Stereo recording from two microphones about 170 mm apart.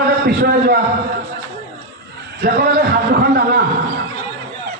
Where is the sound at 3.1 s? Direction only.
70° right (ahead or behind).